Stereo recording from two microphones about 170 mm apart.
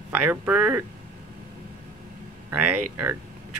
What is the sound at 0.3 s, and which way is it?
Speech, 10° right (ahead or behind).